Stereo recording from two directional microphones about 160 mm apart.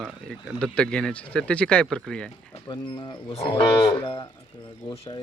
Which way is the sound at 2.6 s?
25° left (ahead or behind).